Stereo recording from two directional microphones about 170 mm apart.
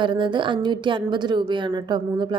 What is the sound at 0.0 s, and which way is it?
A woman's voice, 30° right (ahead or behind).